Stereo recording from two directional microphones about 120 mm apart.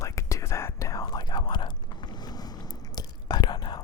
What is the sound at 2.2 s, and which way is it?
Biting, 35° left (ahead or behind).